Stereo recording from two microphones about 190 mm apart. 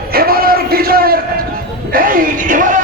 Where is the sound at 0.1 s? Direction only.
50° right (ahead or behind).